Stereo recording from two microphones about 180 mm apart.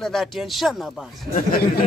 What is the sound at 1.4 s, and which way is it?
Speech, 55° left (ahead or behind).